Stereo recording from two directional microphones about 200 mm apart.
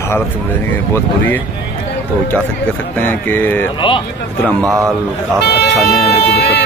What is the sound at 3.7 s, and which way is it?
Speech, 25° left (ahead or behind).